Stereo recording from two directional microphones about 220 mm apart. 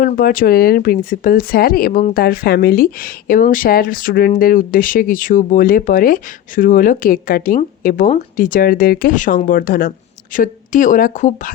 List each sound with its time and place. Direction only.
0.0 s speech: 40° left (ahead or behind)